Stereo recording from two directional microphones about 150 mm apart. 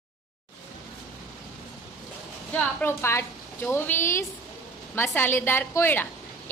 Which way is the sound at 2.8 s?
15° left (ahead or behind).